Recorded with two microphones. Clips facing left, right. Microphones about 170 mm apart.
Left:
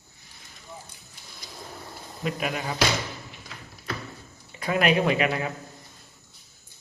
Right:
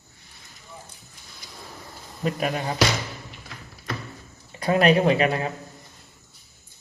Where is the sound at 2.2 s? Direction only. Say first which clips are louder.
Right 3 dB; 40° right (ahead or behind).